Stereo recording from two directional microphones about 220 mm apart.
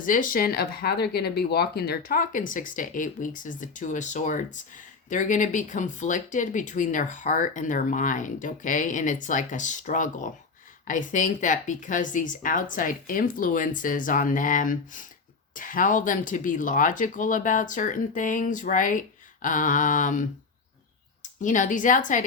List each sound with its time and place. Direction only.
0.0 s speech: 35° left (ahead or behind)
21.4 s speech: 35° left (ahead or behind)